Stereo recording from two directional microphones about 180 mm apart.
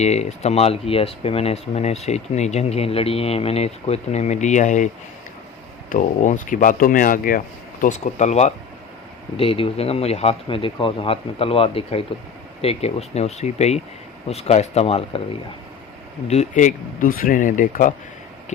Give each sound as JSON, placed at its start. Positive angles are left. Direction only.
{"t": 0.0, "sound": "speech", "side_deg": 40}
{"t": 5.9, "sound": "speech", "side_deg": 45}
{"t": 16.3, "sound": "speech", "side_deg": 40}